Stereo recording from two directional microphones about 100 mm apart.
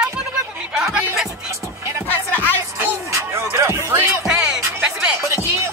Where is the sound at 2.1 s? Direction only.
20° left (ahead or behind).